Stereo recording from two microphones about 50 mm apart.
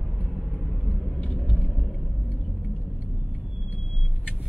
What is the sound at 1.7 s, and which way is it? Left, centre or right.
Vehicle, centre.